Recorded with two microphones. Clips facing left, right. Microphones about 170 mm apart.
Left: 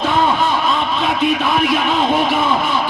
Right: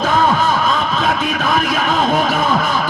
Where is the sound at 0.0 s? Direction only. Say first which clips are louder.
Right 1 dB; 45° right (ahead or behind).